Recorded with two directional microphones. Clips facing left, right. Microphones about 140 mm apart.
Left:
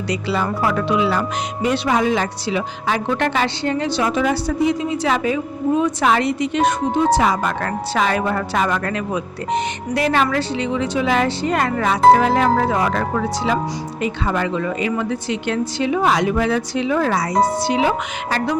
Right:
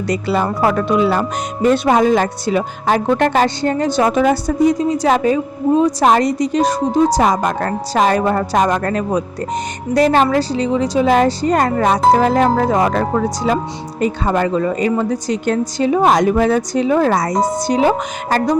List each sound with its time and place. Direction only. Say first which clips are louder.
0.1 s speech: right 4 dB; 45° right (ahead or behind)